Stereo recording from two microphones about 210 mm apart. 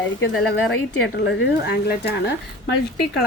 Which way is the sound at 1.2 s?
55° left (ahead or behind).